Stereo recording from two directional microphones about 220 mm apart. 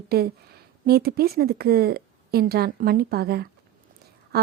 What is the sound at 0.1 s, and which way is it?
Speech, 45° right (ahead or behind).